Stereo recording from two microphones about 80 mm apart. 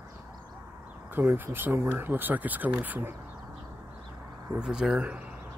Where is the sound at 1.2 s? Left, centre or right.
Right.